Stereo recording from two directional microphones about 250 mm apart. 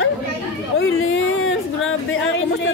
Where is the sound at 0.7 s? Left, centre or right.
Left.